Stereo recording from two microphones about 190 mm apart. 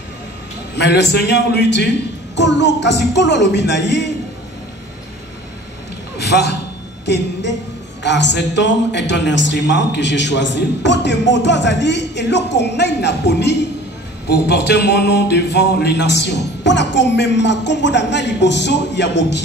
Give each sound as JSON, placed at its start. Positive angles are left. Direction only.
{"t": 0.7, "sound": "a man's voice", "side_deg": 65}
{"t": 6.1, "sound": "a sound", "side_deg": 60}
{"t": 7.1, "sound": "a man's voice", "side_deg": 65}